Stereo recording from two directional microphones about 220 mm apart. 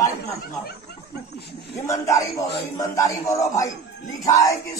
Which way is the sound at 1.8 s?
15° left (ahead or behind).